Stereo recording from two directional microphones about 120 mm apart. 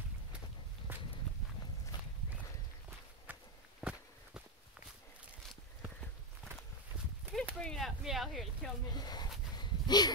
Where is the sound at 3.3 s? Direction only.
15° right (ahead or behind).